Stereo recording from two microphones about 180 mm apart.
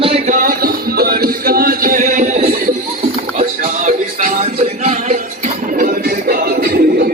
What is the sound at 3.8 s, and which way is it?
Music, 45° right (ahead or behind).